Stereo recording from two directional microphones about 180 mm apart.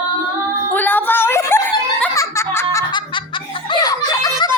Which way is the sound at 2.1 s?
15° left (ahead or behind).